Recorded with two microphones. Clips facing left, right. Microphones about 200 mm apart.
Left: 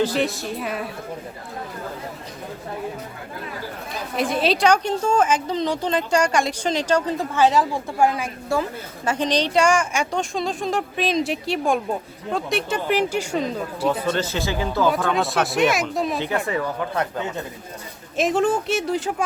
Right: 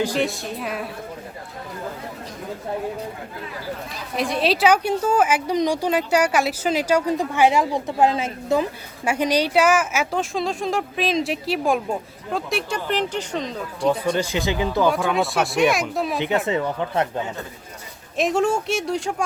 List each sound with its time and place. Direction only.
0.1 s a woman's voice: centre (ahead or behind)
4.2 s a woman's voice: centre (ahead or behind); by 8.6 s 20° right (ahead or behind)
9.0 s a woman's voice: 10° right (ahead or behind); by 14.0 s 5° left (ahead or behind)
14.0 s a woman's voice: 15° right (ahead or behind)
14.8 s a woman's voice: centre (ahead or behind)
16.1 s a woman's voice: 15° right (ahead or behind)
18.2 s a woman's voice: centre (ahead or behind)